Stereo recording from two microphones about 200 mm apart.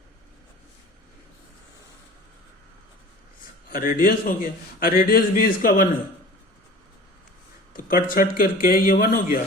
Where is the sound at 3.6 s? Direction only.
45° left (ahead or behind).